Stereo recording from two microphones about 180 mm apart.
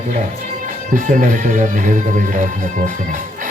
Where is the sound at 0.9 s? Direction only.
45° right (ahead or behind).